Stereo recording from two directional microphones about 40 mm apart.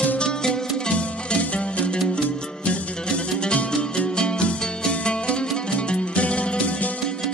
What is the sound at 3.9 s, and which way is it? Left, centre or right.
Music, left.